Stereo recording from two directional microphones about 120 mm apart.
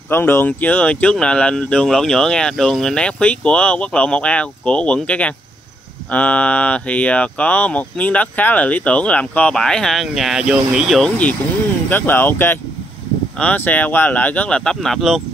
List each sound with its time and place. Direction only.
0.1 s speech: 20° left (ahead or behind); by 11.1 s 5° right (ahead or behind)
11.9 s speech: 15° left (ahead or behind); by 15.2 s centre (ahead or behind)